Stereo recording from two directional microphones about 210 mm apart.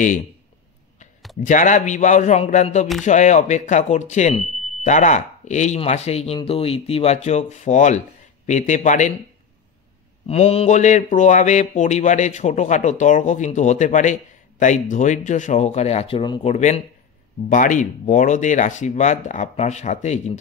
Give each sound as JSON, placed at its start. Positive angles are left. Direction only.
{"t": 1.4, "sound": "speech", "side_deg": 35}
{"t": 10.2, "sound": "speech", "side_deg": 30}